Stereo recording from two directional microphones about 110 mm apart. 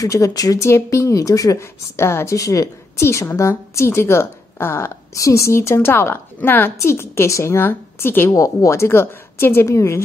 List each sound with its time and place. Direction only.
0.0 s speech: 30° left (ahead or behind)
8.3 s speech: 30° left (ahead or behind)